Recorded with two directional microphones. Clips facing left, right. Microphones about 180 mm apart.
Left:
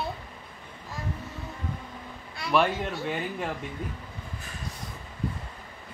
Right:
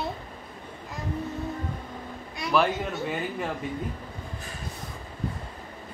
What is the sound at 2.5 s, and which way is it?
Speech, centre (ahead or behind).